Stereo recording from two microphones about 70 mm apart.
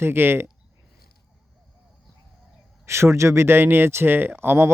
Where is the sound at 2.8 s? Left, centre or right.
Right.